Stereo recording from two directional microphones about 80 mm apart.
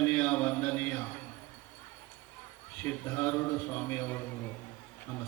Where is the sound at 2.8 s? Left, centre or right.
Left.